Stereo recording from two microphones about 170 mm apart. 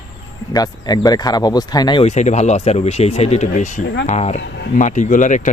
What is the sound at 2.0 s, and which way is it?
Speech, 45° left (ahead or behind).